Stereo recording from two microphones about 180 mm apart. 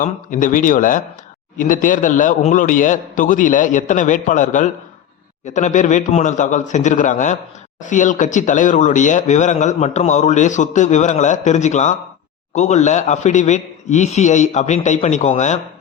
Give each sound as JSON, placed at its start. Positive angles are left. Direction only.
{"t": 0.0, "sound": "a man's voice", "side_deg": 45}